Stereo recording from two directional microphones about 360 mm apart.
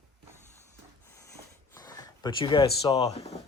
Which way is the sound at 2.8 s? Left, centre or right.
Centre.